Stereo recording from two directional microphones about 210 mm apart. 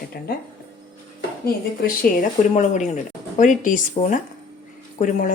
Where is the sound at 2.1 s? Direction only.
45° left (ahead or behind).